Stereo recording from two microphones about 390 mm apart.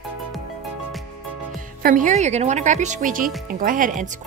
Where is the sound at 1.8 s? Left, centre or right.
Centre.